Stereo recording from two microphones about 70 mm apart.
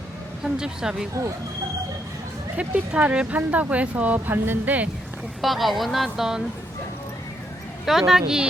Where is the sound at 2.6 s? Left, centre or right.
Right.